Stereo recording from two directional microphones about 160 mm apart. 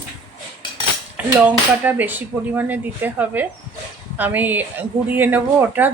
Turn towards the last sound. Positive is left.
turn(degrees=-10)  # may be behind; listen again after turning